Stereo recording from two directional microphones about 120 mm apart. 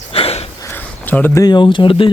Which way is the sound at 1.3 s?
35° left (ahead or behind).